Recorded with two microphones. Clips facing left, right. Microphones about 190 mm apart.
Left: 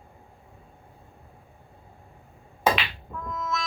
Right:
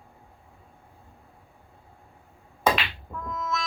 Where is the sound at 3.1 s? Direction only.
Centre (ahead or behind).